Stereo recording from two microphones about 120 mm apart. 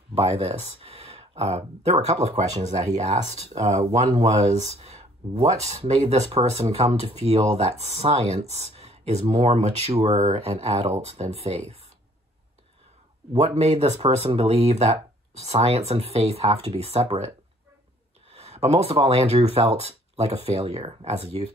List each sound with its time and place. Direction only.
0.1 s speech: 55° right (ahead or behind)
13.3 s speech: 65° right (ahead or behind)
18.3 s speech: 60° right (ahead or behind)